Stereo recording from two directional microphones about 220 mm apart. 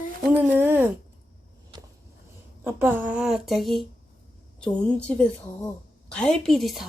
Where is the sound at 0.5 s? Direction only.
10° right (ahead or behind).